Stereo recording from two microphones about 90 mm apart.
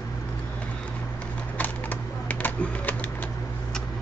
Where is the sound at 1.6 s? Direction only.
20° left (ahead or behind).